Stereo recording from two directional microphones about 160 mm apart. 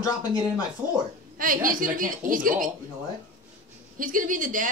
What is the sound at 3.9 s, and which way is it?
Speech, 60° right (ahead or behind).